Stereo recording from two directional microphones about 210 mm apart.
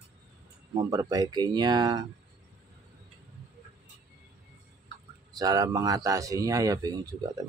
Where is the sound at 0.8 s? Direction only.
20° right (ahead or behind).